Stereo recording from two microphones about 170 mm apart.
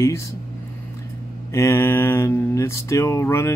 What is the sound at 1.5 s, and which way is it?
Speech, 15° left (ahead or behind).